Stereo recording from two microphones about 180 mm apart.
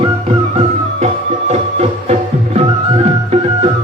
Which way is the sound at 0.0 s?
35° right (ahead or behind).